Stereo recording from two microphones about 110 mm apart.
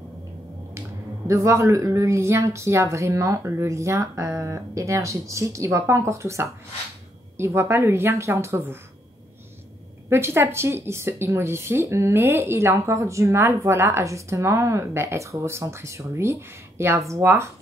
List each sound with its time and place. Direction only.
0.7 s speech: 30° right (ahead or behind)
10.0 s speech: 20° right (ahead or behind)